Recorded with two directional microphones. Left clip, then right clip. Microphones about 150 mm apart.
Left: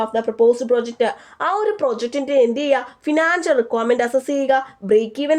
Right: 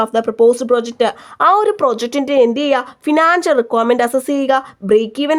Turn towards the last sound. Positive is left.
turn(degrees=-35)  # may be behind; listen again after turning